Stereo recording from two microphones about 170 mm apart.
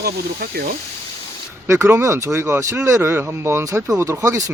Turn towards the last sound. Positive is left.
turn(degrees=-20)  # may be behind; listen again after turning